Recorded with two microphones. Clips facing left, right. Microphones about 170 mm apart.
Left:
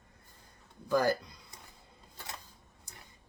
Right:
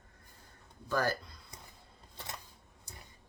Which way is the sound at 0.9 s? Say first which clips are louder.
Left 4 dB; 15° left (ahead or behind).